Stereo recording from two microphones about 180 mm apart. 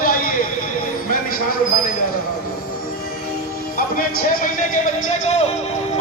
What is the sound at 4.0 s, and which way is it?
A man's voice, 50° left (ahead or behind).